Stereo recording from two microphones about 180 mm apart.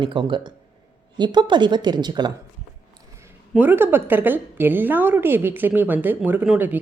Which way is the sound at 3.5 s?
10° right (ahead or behind).